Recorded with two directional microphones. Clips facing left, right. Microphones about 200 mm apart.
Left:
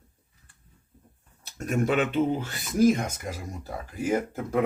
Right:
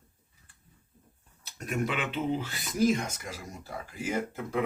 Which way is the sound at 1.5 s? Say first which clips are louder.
Left 6 dB; 45° left (ahead or behind).